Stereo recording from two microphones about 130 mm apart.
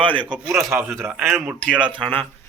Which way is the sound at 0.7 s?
15° right (ahead or behind).